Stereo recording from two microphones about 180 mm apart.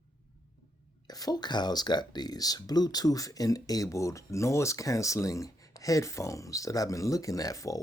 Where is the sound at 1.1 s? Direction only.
20° left (ahead or behind).